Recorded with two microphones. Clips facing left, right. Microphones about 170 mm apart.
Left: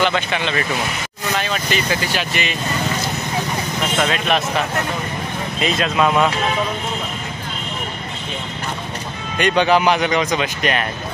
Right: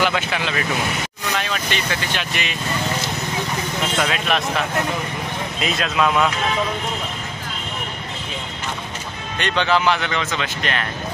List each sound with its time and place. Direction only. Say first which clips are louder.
0.0 s speech: left 2 dB; 5° right (ahead or behind)
4.0 s speech: left 3 dB; centre (ahead or behind)
9.4 s speech: left 4 dB; 10° left (ahead or behind)